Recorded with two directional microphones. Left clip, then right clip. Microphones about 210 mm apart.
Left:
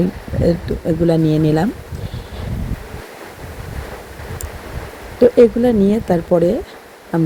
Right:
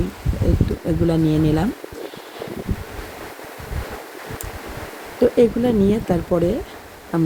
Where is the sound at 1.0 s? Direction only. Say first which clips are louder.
Left 4 dB; 20° left (ahead or behind).